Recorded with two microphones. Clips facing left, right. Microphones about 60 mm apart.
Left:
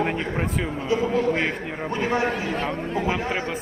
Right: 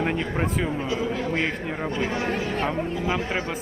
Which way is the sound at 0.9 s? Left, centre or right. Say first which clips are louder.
Left 4 dB; left.